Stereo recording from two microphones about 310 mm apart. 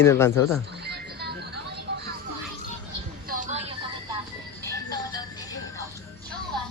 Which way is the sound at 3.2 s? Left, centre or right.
Right.